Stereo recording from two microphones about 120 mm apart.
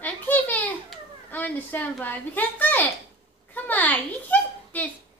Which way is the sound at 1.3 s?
15° left (ahead or behind).